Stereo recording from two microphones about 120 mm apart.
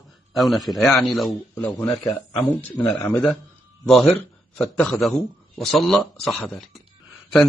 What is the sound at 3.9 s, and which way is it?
A man's voice, centre (ahead or behind).